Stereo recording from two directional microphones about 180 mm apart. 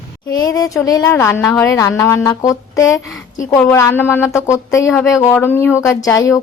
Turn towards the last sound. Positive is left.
turn(degrees=20)  # may be behind; listen again after turning